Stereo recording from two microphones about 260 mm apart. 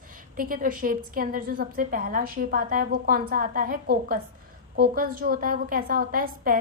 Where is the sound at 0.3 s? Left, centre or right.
Right.